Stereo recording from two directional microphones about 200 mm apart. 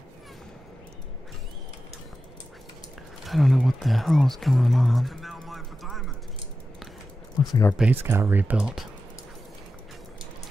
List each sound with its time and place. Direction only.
3.3 s speech: centre (ahead or behind)
7.3 s speech: 15° left (ahead or behind)
7.7 s speech: 10° right (ahead or behind)